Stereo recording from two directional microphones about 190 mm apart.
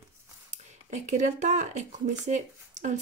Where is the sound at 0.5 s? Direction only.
40° right (ahead or behind).